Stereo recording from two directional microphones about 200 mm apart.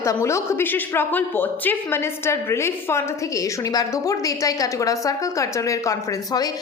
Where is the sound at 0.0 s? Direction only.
15° left (ahead or behind).